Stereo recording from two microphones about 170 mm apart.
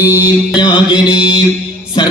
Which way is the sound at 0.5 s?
25° left (ahead or behind).